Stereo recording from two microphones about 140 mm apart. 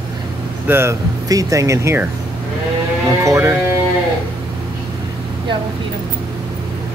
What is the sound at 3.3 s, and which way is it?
Speech, 20° right (ahead or behind).